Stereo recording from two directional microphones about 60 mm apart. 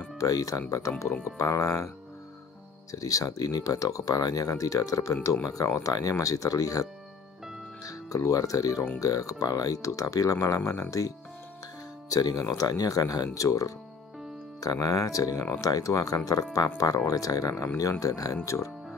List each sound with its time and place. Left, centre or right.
0.2 s speech: left
1.4 s speech: left
2.9 s speech: left
10.6 s speech: left
14.6 s speech: left
16.5 s speech: left